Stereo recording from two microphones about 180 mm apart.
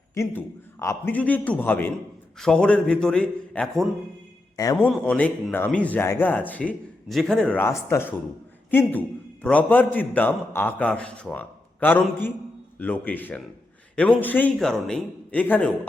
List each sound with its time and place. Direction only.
0.1 s a man's voice: 15° left (ahead or behind)
4.5 s a man's voice: 20° left (ahead or behind)
4.9 s a man's voice: 5° left (ahead or behind)